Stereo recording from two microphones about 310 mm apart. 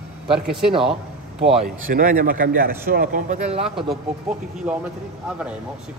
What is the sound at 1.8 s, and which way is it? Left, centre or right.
A man's voice, right.